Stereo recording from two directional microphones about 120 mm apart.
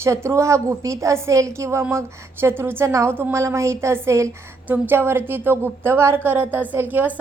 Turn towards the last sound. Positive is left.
turn(degrees=-15)  # may be behind; listen again after turning